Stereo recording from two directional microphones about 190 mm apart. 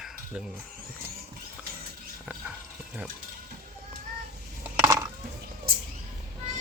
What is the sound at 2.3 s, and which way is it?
Horse, 5° right (ahead or behind).